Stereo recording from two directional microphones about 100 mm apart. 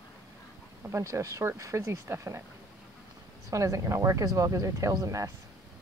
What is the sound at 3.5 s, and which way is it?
Speech, 35° right (ahead or behind).